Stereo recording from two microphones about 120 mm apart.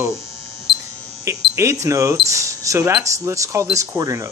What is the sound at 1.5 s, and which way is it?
Speech, 25° right (ahead or behind).